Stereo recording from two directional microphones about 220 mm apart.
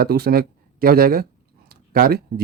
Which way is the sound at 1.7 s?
45° right (ahead or behind).